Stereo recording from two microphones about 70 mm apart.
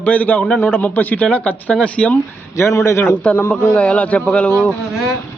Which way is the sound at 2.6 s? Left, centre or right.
Left.